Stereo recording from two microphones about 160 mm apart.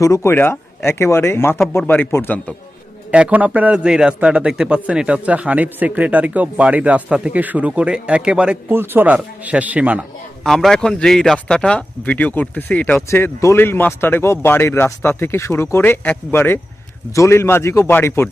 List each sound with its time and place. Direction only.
0.0 s speech: 20° left (ahead or behind)
3.1 s a man's voice: 10° right (ahead or behind)
10.4 s speech: centre (ahead or behind)